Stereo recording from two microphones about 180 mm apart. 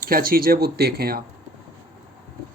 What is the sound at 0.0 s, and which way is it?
Speech, 55° right (ahead or behind).